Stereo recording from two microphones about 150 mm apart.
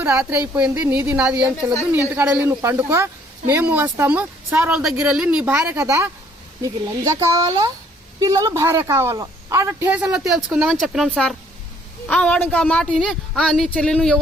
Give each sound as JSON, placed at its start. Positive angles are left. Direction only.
{"t": 0.0, "sound": "speech", "side_deg": -10}
{"t": 5.5, "sound": "a woman's voice", "side_deg": -20}